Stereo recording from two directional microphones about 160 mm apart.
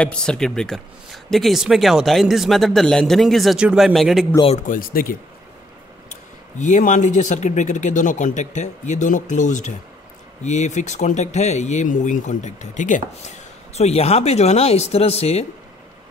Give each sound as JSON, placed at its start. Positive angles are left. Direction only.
{"t": 0.0, "sound": "speech", "side_deg": 5}
{"t": 4.6, "sound": "speech", "side_deg": 65}
{"t": 6.6, "sound": "speech", "side_deg": 50}